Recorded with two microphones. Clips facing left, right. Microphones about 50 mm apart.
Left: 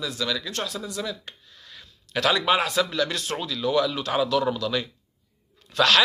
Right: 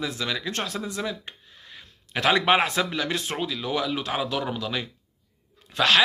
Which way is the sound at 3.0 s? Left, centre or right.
Centre.